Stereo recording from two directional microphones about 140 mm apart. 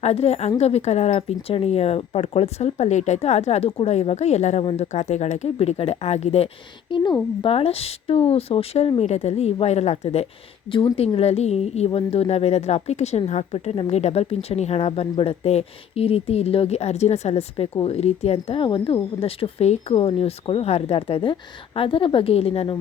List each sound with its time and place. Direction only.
0.0 s a woman's voice: 50° left (ahead or behind)
6.9 s a woman's voice: 35° left (ahead or behind)
10.7 s a woman's voice: 40° left (ahead or behind)